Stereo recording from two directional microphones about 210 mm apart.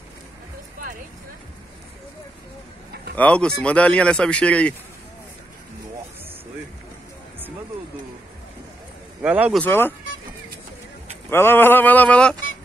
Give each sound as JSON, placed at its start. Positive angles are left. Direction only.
{"t": 3.2, "sound": "speech", "side_deg": 5}
{"t": 9.2, "sound": "speech", "side_deg": -5}
{"t": 9.6, "sound": "speech", "side_deg": 10}
{"t": 11.2, "sound": "speech", "side_deg": 10}